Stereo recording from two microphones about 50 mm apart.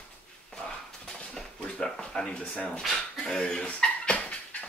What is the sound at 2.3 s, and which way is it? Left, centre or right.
Speech, left.